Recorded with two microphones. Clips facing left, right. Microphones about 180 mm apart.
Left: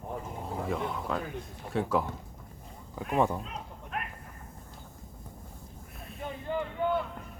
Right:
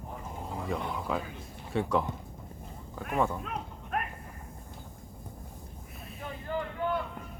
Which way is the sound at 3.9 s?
45° right (ahead or behind).